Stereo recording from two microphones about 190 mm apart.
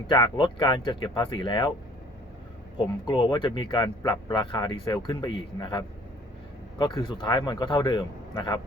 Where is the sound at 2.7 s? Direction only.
25° left (ahead or behind).